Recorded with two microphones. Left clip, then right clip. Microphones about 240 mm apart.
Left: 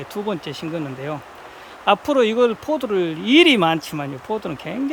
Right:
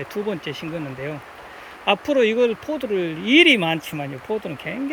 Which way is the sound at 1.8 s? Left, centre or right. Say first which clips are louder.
Left 2 dB; centre.